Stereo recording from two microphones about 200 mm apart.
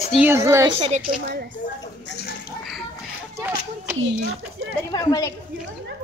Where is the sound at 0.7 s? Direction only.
30° right (ahead or behind).